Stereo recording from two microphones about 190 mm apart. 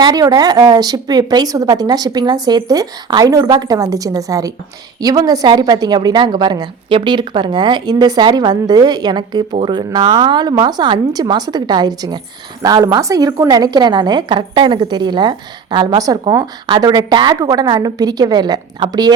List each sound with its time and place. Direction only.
0.0 s a woman's voice: 20° right (ahead or behind)